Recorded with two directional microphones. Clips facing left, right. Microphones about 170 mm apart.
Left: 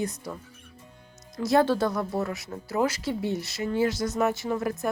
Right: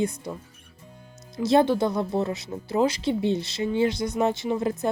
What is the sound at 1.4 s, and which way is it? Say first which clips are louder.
Speech: right 2 dB; 20° right (ahead or behind).